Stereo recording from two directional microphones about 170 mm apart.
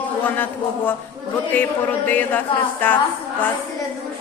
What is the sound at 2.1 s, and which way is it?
Speech, 10° left (ahead or behind).